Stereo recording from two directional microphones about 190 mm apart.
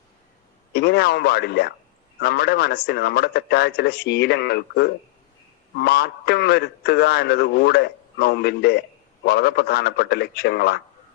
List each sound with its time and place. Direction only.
0.7 s a man's voice: 60° left (ahead or behind)